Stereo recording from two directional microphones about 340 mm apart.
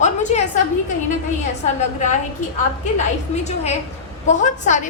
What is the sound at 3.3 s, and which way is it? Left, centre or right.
A woman's voice, centre.